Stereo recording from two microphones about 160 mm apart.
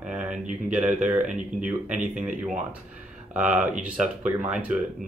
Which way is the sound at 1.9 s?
50° right (ahead or behind).